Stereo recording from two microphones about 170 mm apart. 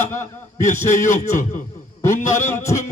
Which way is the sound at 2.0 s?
15° left (ahead or behind).